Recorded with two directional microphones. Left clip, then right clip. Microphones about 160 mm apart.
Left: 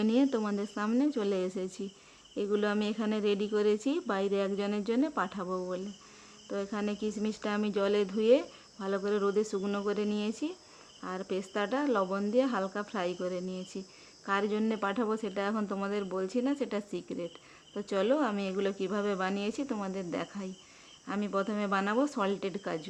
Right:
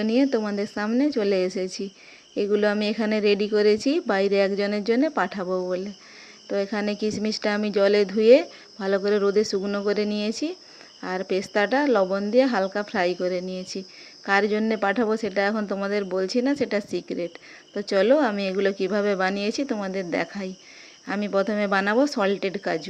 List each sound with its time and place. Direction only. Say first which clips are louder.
0.0 s speech: right 7 dB; 15° right (ahead or behind)